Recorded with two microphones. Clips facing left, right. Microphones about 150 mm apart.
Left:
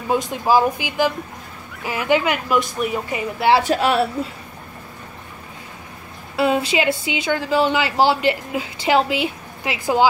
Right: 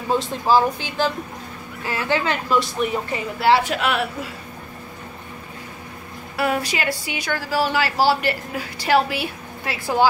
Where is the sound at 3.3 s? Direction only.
20° left (ahead or behind).